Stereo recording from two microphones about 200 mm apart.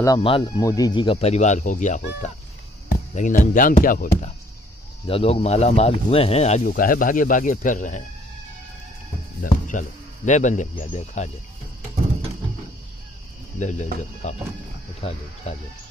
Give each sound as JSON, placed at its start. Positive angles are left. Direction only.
{"t": 0.0, "sound": "speech", "side_deg": 25}
{"t": 5.0, "sound": "speech", "side_deg": 30}
{"t": 6.7, "sound": "speech", "side_deg": 45}
{"t": 9.4, "sound": "speech", "side_deg": 40}
{"t": 13.6, "sound": "speech", "side_deg": 35}